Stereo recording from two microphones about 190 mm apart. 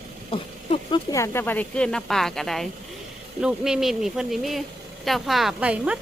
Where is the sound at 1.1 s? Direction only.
15° left (ahead or behind).